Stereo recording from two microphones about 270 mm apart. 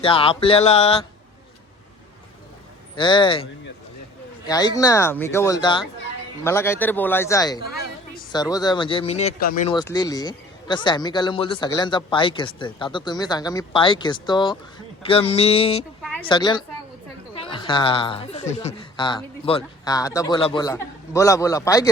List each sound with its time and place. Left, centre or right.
0.0 s speech: centre
2.9 s speech: centre
4.4 s speech: centre; by 9.6 s left
9.6 s speech: centre